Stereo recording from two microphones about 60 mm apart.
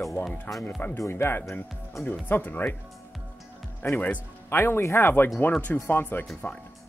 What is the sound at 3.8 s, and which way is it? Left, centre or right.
Speech, left.